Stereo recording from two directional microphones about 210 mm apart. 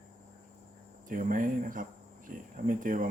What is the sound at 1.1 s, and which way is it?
Speech, 40° right (ahead or behind).